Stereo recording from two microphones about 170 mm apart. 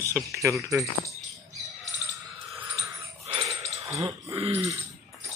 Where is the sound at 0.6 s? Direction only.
20° right (ahead or behind).